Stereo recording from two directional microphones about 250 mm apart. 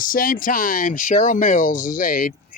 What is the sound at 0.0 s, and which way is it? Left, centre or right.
Speech, left.